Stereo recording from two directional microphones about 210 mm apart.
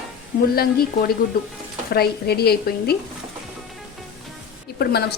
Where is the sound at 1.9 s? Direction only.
50° left (ahead or behind).